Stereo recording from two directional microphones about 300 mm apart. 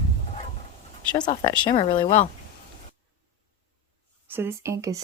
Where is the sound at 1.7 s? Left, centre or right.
Centre.